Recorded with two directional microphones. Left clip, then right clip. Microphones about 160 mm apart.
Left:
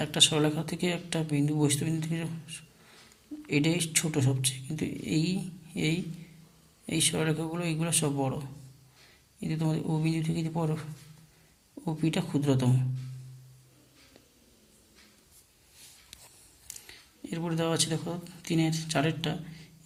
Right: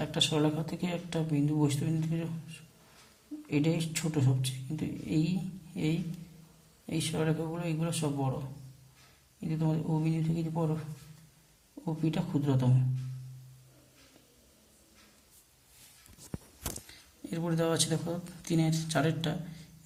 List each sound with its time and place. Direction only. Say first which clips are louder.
0.0 s speech: left 4 dB; 20° left (ahead or behind)
9.4 s speech: left 2 dB; 20° left (ahead or behind)
11.9 s speech: left 3 dB; 20° left (ahead or behind)
16.8 s speech: left 2 dB; 10° left (ahead or behind)